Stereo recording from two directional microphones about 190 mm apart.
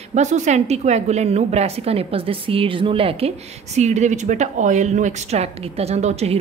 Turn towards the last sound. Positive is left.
turn(degrees=-35)  # may be behind; listen again after turning